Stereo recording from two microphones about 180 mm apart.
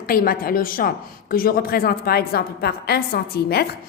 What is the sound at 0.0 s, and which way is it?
A woman's voice, 55° left (ahead or behind).